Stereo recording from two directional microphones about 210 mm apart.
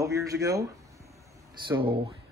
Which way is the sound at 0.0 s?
15° right (ahead or behind).